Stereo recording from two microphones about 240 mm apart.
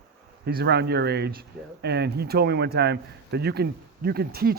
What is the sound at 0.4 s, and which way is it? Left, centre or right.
A man's voice, right.